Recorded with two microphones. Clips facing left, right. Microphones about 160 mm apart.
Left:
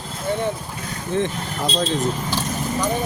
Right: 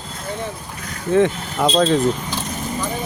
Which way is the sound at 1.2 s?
70° right (ahead or behind).